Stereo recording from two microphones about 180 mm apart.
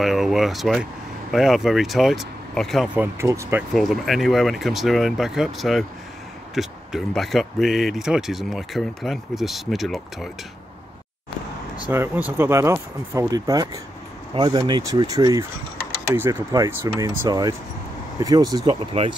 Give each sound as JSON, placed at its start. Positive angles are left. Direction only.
{"t": 0.0, "sound": "speech", "side_deg": 0}
{"t": 3.0, "sound": "speech", "side_deg": -15}
{"t": 3.7, "sound": "speech", "side_deg": 0}
{"t": 11.9, "sound": "speech", "side_deg": -10}